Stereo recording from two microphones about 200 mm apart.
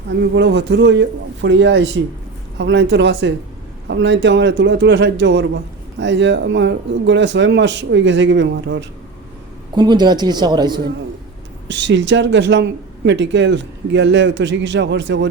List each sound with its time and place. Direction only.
0.1 s speech: 60° right (ahead or behind)
9.7 s speech: 20° right (ahead or behind)
11.7 s speech: 65° right (ahead or behind)